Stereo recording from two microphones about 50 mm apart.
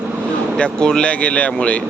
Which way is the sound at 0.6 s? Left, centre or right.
Centre.